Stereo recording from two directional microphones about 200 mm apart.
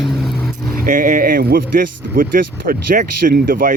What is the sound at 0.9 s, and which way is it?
Speech, 40° right (ahead or behind).